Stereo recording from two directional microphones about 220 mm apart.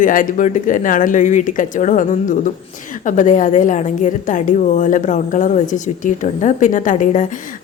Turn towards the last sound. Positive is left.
turn(degrees=35)  # may be behind; listen again after turning